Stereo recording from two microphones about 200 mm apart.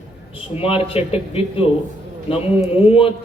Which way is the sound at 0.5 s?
30° left (ahead or behind).